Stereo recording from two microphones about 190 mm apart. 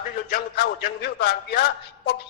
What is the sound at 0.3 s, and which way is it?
A woman's voice, 55° left (ahead or behind).